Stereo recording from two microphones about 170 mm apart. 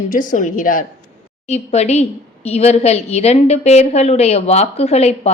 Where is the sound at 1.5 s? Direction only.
40° left (ahead or behind).